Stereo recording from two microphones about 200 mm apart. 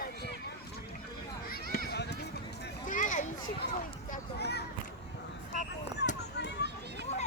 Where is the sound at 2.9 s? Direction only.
40° left (ahead or behind).